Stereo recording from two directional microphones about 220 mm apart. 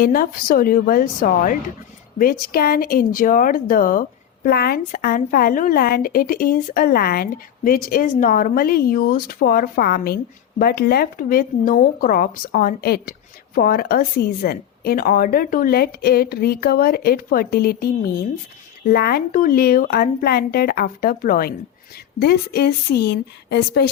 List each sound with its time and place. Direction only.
0.0 s a woman's voice: 40° left (ahead or behind)